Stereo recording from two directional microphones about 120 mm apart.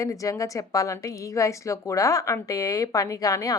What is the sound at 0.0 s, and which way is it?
A woman's voice, 25° left (ahead or behind).